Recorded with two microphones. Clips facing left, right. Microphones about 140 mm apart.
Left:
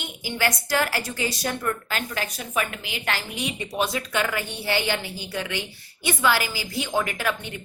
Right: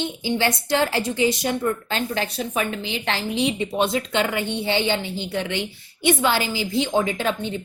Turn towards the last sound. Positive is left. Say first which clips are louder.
# right 4 dB
turn(degrees=-20)  # may be behind; listen again after turning